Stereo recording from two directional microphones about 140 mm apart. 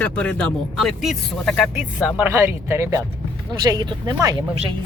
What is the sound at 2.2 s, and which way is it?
Speech, 15° right (ahead or behind).